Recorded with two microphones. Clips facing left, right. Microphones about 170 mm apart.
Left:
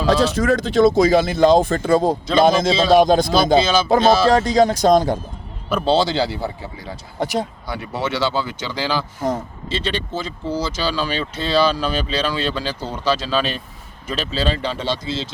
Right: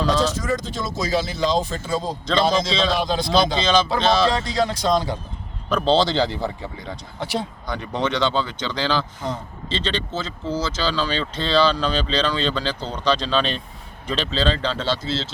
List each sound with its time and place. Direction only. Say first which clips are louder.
0.1 s speech: left 5 dB; 65° left (ahead or behind)
3.2 s music: left 1 dB; 5° left (ahead or behind)
3.6 s speech: left 1 dB; 5° left (ahead or behind)
4.0 s music: left 4 dB; 5° left (ahead or behind)
4.3 s speech: left 7 dB; 45° left (ahead or behind)
5.6 s speech: left 1 dB; 10° left (ahead or behind)
7.2 s speech: left 5 dB; 45° left (ahead or behind)
7.7 s speech: right 4 dB; 5° left (ahead or behind)